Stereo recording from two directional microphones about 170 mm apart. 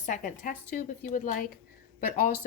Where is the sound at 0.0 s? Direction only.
50° left (ahead or behind).